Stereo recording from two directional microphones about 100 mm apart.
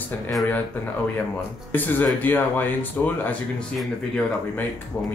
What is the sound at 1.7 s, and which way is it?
Speech, 20° left (ahead or behind).